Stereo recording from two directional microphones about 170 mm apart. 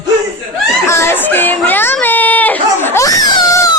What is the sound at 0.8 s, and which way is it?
Speech, 15° left (ahead or behind).